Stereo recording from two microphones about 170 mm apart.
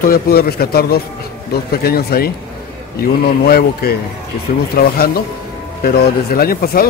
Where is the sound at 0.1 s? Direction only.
65° left (ahead or behind).